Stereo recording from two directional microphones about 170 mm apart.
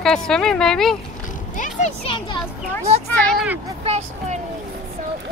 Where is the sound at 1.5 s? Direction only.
45° left (ahead or behind).